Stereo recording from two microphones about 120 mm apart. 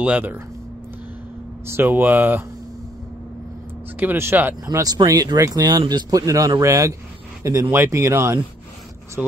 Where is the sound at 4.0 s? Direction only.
20° right (ahead or behind).